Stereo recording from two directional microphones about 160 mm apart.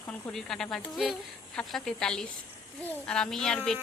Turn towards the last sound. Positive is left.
turn(degrees=5)  # may be behind; listen again after turning